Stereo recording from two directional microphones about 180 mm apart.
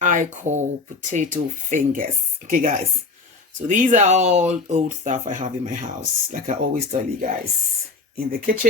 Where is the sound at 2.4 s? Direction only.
50° right (ahead or behind).